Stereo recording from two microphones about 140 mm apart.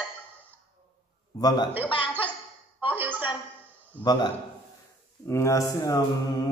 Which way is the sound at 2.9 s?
15° right (ahead or behind).